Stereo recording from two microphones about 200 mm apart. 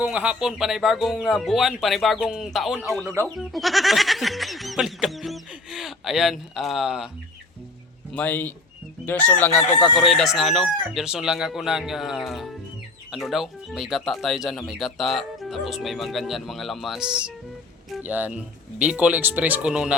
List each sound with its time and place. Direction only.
0.0 s speech: 5° right (ahead or behind)
8.1 s fowl: 10° left (ahead or behind)
9.7 s speech: 25° left (ahead or behind)
10.0 s speech: centre (ahead or behind)